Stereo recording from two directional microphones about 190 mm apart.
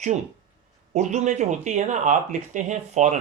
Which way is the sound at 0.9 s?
40° right (ahead or behind).